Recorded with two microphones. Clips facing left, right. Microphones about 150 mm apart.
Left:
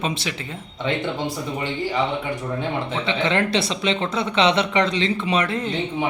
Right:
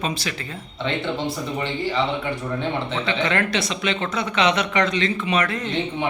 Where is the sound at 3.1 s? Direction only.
25° left (ahead or behind).